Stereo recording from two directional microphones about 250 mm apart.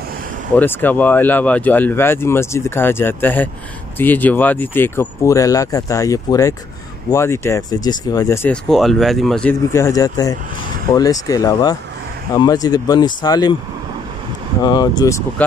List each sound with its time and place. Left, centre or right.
0.6 s speech: centre
14.6 s speech: centre